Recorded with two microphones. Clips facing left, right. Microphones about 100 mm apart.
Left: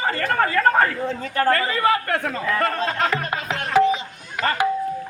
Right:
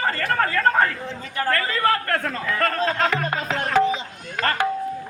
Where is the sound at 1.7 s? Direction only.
15° left (ahead or behind).